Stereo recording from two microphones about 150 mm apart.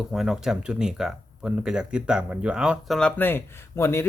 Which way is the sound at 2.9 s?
10° left (ahead or behind).